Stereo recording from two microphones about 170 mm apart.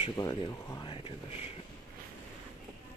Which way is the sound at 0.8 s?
30° left (ahead or behind).